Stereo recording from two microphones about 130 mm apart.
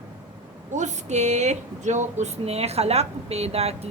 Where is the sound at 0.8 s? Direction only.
65° right (ahead or behind).